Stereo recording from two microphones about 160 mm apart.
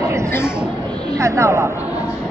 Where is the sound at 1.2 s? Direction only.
20° right (ahead or behind).